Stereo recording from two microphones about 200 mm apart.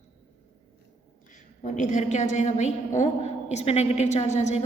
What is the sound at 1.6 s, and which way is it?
A woman's voice, 40° left (ahead or behind).